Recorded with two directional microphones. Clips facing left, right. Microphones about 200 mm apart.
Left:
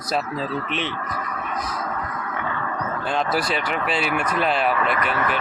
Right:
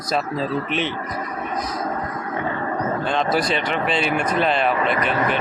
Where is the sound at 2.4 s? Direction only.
30° right (ahead or behind).